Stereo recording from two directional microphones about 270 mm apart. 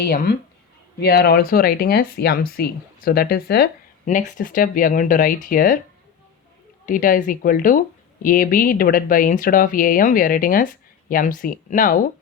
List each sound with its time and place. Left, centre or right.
0.0 s speech: left
6.8 s speech: left